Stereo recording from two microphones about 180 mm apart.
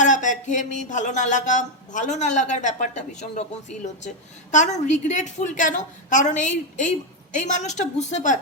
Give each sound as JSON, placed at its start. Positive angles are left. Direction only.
{"t": 0.0, "sound": "music", "side_deg": 45}
{"t": 3.8, "sound": "a woman's voice", "side_deg": 40}
{"t": 4.5, "sound": "music", "side_deg": 40}
{"t": 7.3, "sound": "a woman's voice", "side_deg": 40}